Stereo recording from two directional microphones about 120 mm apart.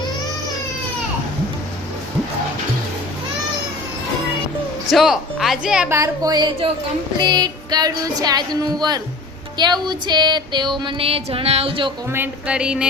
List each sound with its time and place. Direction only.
4.9 s speech: centre (ahead or behind)
5.9 s a woman's voice: 30° right (ahead or behind)
10.8 s a sound: 45° right (ahead or behind)
12.0 s speech: 15° right (ahead or behind)